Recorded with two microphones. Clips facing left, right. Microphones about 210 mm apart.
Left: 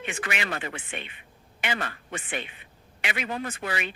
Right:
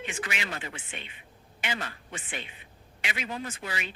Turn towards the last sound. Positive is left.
turn(degrees=60)  # may be behind; listen again after turning